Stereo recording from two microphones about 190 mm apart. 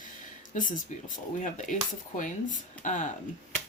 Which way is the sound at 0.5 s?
45° left (ahead or behind).